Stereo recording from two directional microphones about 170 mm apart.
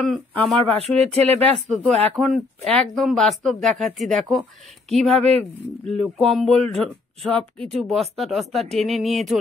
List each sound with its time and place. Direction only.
0.0 s speech: 5° left (ahead or behind)
0.9 s speech: 35° right (ahead or behind)
1.4 s speech: 10° left (ahead or behind)
5.1 s speech: 35° right (ahead or behind)
5.9 s speech: 5° left (ahead or behind)